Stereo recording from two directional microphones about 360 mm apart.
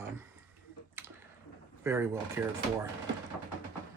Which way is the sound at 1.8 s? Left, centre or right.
Centre.